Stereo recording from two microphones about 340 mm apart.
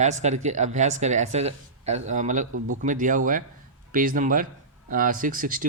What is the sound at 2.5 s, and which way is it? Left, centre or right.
Speech, right.